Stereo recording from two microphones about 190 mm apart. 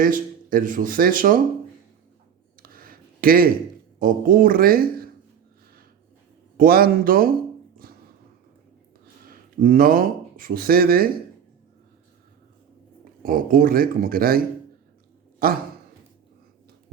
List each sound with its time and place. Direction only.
0.0 s speech: 45° right (ahead or behind)
2.6 s a sound: 50° right (ahead or behind)
4.0 s speech: 45° right (ahead or behind)
6.6 s speech: 50° right (ahead or behind)
7.8 s a sound: 50° right (ahead or behind)
9.2 s speech: 50° right (ahead or behind)
13.2 s speech: 45° right (ahead or behind)